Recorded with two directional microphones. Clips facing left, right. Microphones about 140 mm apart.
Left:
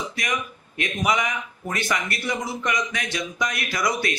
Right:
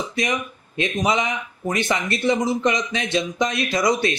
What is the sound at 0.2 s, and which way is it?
Speech, 25° right (ahead or behind).